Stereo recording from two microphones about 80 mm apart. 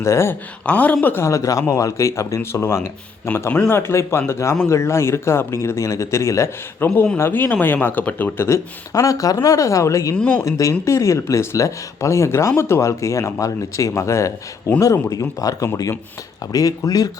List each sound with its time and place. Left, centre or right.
0.0 s speech: left
0.6 s speech: centre
1.0 s speech: left
1.3 s speech: left
8.4 s speech: left
10.2 s speech: centre
10.4 s speech: left
15.4 s speech: left